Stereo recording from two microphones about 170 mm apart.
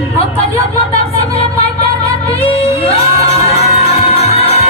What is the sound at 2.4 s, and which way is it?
Music, 35° left (ahead or behind).